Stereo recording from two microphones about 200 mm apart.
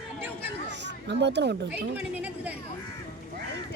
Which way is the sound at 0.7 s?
60° right (ahead or behind).